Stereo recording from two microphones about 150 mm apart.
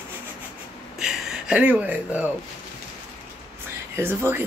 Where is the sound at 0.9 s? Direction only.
5° right (ahead or behind).